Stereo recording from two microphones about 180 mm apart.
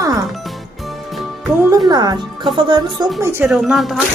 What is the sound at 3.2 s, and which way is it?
Speech, 15° right (ahead or behind).